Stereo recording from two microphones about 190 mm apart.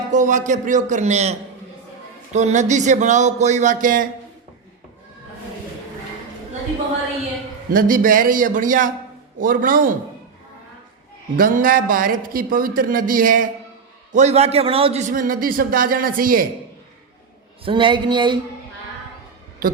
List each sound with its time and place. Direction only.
0.1 s speech: 40° right (ahead or behind)
7.7 s a man's voice: 45° right (ahead or behind)
11.3 s a man's voice: 45° right (ahead or behind)
17.7 s speech: 25° right (ahead or behind)